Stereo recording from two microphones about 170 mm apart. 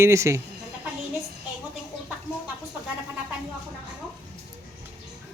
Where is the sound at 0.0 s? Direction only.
15° right (ahead or behind).